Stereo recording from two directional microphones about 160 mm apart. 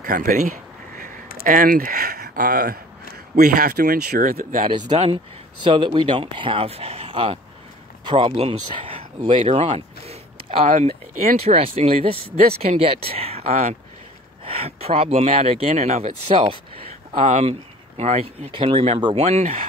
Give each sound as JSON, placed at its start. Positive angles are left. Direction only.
{"t": 0.0, "sound": "speech", "side_deg": -60}
{"t": 4.6, "sound": "speech", "side_deg": -25}
{"t": 4.9, "sound": "speech", "side_deg": -40}
{"t": 5.7, "sound": "speech", "side_deg": -30}
{"t": 9.4, "sound": "a sound", "side_deg": -40}
{"t": 11.3, "sound": "speech", "side_deg": -40}